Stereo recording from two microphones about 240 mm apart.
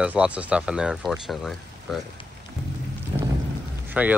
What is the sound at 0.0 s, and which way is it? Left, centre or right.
Speech, centre.